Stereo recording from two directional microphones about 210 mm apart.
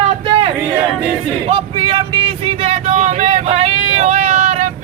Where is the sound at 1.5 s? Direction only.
25° right (ahead or behind).